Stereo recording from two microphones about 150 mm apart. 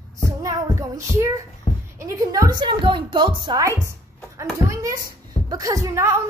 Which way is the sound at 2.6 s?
35° right (ahead or behind).